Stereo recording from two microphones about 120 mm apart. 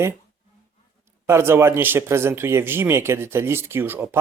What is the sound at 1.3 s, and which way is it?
A man's voice, 20° right (ahead or behind).